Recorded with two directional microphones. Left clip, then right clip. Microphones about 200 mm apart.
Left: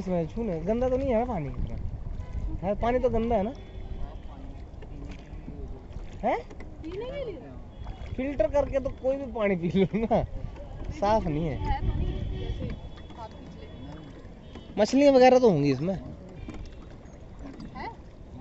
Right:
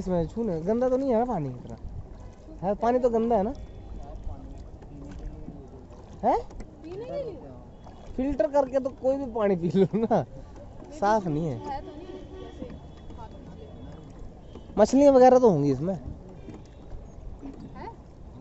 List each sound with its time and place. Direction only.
0.0 s speech: 30° right (ahead or behind)
7.1 s speech: 60° right (ahead or behind)
8.2 s speech: 30° right (ahead or behind)
14.8 s speech: 20° right (ahead or behind)